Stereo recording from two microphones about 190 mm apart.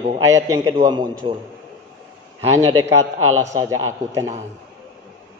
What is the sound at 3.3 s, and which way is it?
A man's voice, 15° right (ahead or behind).